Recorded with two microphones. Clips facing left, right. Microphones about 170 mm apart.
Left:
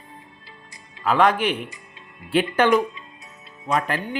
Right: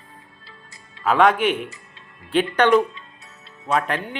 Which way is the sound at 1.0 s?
Centre (ahead or behind).